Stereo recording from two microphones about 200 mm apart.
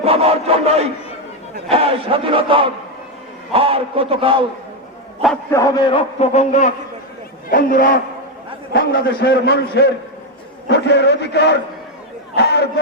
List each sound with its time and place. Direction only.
0.0 s battle cry: 30° right (ahead or behind)
5.5 s a man's voice: 15° left (ahead or behind); by 7.9 s 40° left (ahead or behind)
8.7 s a man's voice: 55° left (ahead or behind)